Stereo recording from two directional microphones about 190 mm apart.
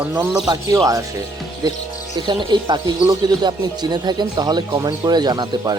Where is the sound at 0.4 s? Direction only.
20° right (ahead or behind).